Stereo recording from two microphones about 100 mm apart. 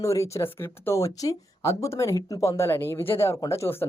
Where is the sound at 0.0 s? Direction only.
30° left (ahead or behind).